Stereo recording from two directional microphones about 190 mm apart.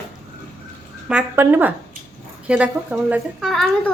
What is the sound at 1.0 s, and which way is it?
A woman's voice, 10° right (ahead or behind).